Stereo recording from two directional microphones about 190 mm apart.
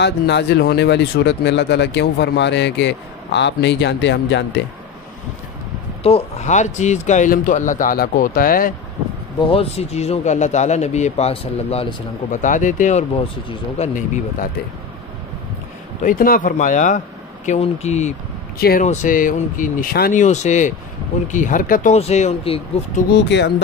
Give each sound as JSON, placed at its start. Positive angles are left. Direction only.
{"t": 0.0, "sound": "speech", "side_deg": 65}
{"t": 6.0, "sound": "a man's voice", "side_deg": 35}
{"t": 9.4, "sound": "a man's voice", "side_deg": 30}
{"t": 16.0, "sound": "a man's voice", "side_deg": 45}
{"t": 18.6, "sound": "a man's voice", "side_deg": 55}
{"t": 23.1, "sound": "speech", "side_deg": 65}